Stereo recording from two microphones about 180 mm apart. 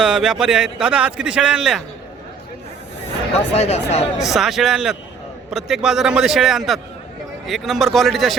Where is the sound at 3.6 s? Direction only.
35° left (ahead or behind).